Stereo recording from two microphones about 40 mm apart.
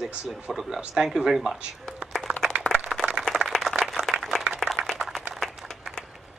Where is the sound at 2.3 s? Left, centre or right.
Right.